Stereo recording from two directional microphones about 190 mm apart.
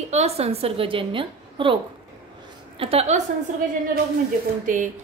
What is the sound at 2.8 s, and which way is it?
Speech, 30° right (ahead or behind).